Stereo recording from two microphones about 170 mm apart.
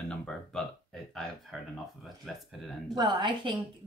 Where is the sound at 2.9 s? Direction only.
25° right (ahead or behind).